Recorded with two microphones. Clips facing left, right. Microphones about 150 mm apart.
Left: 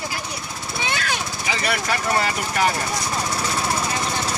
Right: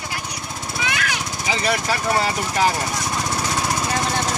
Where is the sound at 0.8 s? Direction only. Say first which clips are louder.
Even; 30° left (ahead or behind).